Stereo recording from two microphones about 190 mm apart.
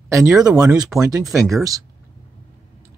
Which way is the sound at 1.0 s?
20° right (ahead or behind).